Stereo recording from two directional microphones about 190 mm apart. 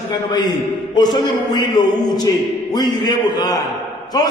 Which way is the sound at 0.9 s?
20° left (ahead or behind).